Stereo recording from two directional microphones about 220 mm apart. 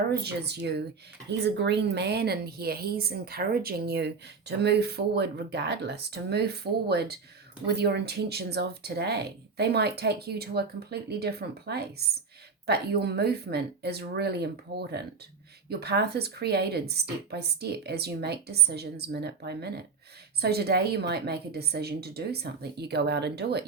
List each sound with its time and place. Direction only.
0.1 s a woman's voice: 45° right (ahead or behind)